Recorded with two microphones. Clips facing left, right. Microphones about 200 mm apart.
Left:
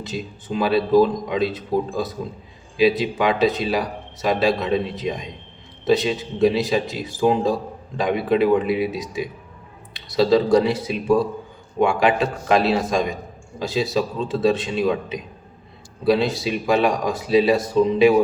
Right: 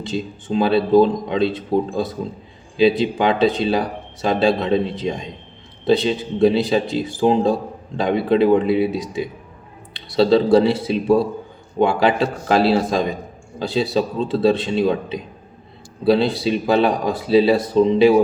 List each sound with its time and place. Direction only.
0.0 s a man's voice: 30° right (ahead or behind)